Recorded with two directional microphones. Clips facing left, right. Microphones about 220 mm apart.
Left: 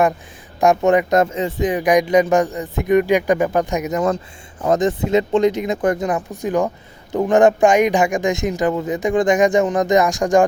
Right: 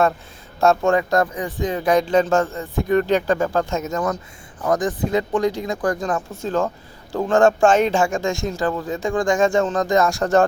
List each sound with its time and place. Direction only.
0.6 s speech: 15° left (ahead or behind)